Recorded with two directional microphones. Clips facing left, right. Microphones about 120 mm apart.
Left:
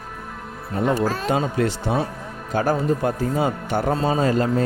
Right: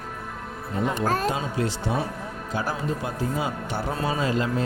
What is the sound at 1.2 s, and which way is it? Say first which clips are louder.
Speech: left 5 dB; 60° left (ahead or behind).